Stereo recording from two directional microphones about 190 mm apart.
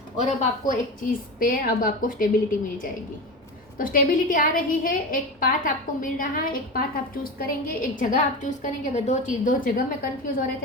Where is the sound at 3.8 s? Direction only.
50° left (ahead or behind).